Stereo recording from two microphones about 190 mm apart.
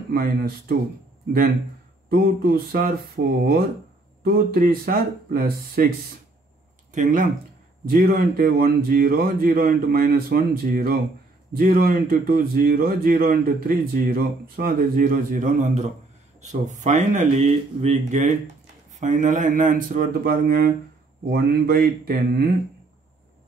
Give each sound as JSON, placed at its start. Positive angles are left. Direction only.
{"t": 0.1, "sound": "speech", "side_deg": -50}
{"t": 2.0, "sound": "speech", "side_deg": -55}
{"t": 6.9, "sound": "speech", "side_deg": -45}